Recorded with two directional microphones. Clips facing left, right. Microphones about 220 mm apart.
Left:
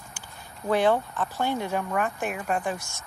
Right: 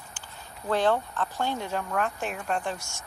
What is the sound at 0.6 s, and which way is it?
Speech, 10° left (ahead or behind).